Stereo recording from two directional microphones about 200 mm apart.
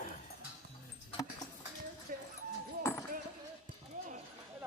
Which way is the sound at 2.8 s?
15° left (ahead or behind).